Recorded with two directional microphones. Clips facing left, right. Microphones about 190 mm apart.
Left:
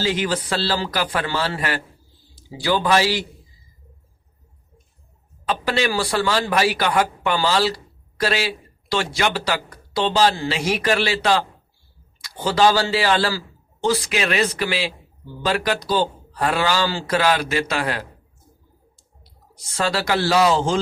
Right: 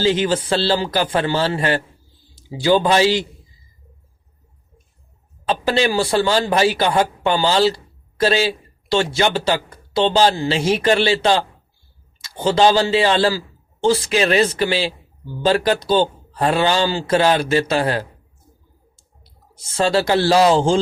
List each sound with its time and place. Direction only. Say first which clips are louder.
0.0 s a man's voice: right 5 dB; 25° right (ahead or behind)
5.5 s a man's voice: right 3 dB; 30° right (ahead or behind)
19.7 s a man's voice: right 5 dB; 25° right (ahead or behind)